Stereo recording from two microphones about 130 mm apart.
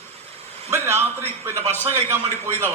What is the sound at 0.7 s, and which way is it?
A man's voice, 20° right (ahead or behind).